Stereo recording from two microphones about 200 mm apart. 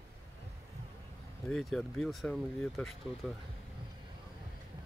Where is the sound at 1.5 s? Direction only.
Centre (ahead or behind).